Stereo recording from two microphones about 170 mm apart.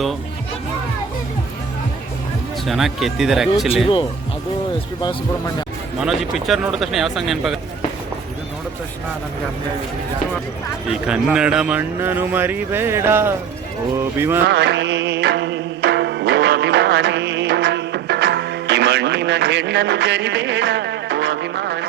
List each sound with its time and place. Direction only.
2.6 s speech: centre (ahead or behind)
6.0 s speech: centre (ahead or behind)
11.0 s speech: 5° right (ahead or behind)
14.4 s music: 90° right